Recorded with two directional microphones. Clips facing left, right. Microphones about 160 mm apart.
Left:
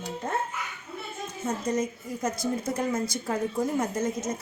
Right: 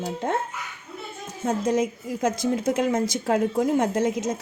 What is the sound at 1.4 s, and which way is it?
A woman's voice, 90° right.